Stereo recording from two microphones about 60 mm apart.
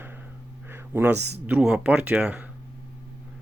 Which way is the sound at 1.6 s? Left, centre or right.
Centre.